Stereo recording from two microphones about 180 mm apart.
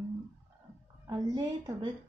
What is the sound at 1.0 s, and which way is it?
Speech, 25° right (ahead or behind).